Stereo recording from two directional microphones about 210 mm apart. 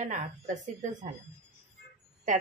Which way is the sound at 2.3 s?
35° right (ahead or behind).